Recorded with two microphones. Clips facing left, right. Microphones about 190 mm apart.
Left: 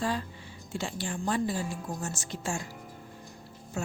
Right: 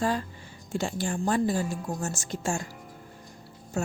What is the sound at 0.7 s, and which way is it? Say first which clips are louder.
A woman's voice: right 5 dB; 45° right (ahead or behind).